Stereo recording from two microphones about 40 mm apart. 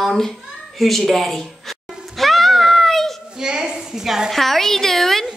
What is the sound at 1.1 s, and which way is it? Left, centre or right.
Speech, centre.